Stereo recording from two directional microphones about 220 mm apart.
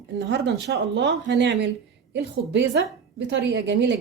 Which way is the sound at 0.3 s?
55° right (ahead or behind).